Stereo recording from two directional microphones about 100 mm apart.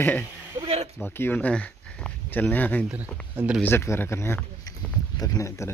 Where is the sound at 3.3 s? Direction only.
15° right (ahead or behind).